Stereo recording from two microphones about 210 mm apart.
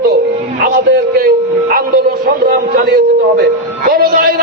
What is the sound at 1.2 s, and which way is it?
A man's voice, 45° right (ahead or behind).